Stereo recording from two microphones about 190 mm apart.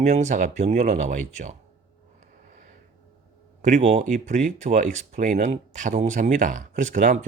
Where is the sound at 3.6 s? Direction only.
35° right (ahead or behind).